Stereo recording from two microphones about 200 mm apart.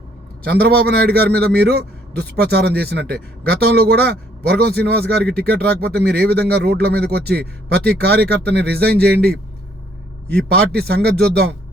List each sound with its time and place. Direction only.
0.4 s a man's voice: 50° right (ahead or behind)
10.7 s a man's voice: 50° right (ahead or behind)